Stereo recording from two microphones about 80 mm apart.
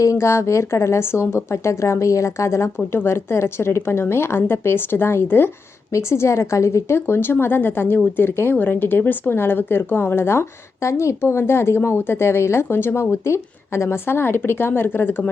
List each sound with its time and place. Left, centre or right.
0.0 s a woman's voice: left